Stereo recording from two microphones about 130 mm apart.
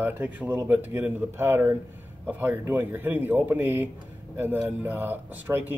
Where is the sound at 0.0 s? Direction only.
15° right (ahead or behind).